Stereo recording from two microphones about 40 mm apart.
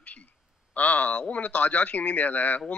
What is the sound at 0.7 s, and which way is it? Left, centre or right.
Speech, left.